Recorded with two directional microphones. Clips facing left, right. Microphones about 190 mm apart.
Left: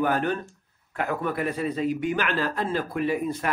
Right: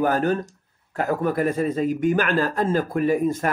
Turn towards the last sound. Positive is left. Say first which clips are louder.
# right 5 dB
turn(degrees=-45)  # may be behind; listen again after turning